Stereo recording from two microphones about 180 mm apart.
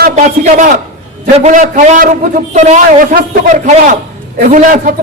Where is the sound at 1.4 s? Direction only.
40° right (ahead or behind).